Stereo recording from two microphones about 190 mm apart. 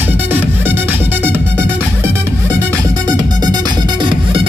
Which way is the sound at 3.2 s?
20° right (ahead or behind).